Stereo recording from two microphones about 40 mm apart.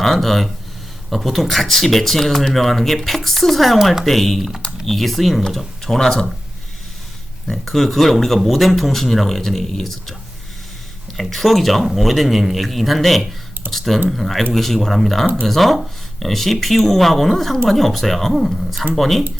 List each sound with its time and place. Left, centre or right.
0.0 s speech: centre
7.4 s speech: centre
11.2 s speech: centre